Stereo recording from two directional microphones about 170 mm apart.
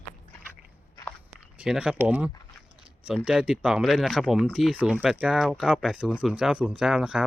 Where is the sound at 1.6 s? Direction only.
5° right (ahead or behind).